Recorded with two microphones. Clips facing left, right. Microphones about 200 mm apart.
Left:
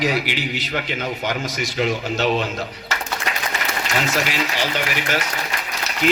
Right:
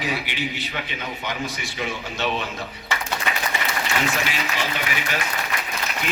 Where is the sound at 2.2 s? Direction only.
40° left (ahead or behind).